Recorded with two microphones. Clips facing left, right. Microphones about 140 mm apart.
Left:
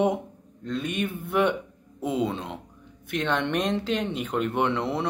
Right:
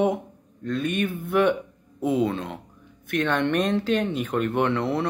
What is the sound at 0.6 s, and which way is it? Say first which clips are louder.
Speech: right 3 dB; 20° left (ahead or behind).